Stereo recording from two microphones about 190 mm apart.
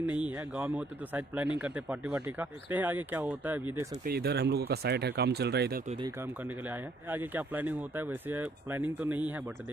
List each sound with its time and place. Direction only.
0.2 s speech: 10° right (ahead or behind)
4.0 s speech: 55° right (ahead or behind)
6.0 s speech: 15° right (ahead or behind)